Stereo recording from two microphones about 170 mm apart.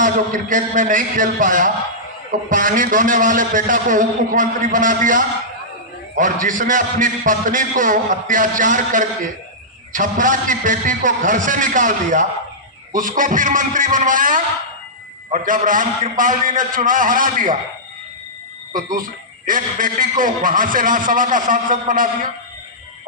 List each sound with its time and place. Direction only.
0.0 s a man's voice: 50° right (ahead or behind)
18.7 s a man's voice: 55° right (ahead or behind)